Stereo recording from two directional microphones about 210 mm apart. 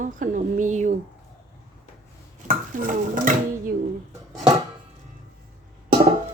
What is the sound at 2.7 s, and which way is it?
Speech, 40° right (ahead or behind).